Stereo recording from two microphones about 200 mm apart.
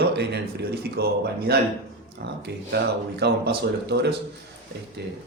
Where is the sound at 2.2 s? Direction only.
55° right (ahead or behind).